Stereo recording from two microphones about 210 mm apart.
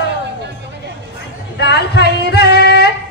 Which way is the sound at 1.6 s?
50° left (ahead or behind).